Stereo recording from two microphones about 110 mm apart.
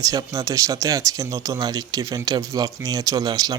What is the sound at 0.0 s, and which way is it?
Speech, 30° right (ahead or behind).